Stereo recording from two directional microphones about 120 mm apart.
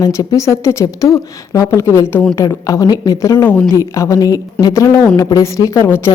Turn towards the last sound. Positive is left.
turn(degrees=25)  # may be behind; listen again after turning